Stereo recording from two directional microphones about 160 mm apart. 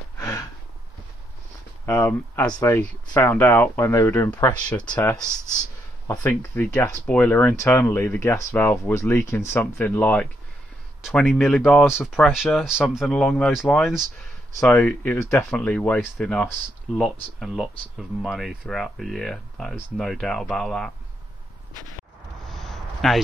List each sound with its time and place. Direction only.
0.2 s snort: 20° left (ahead or behind)
1.9 s speech: 15° left (ahead or behind)
22.5 s a sound: centre (ahead or behind)